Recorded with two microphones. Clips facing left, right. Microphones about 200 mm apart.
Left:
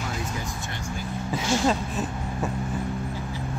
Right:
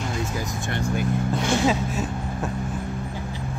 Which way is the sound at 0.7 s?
60° right (ahead or behind).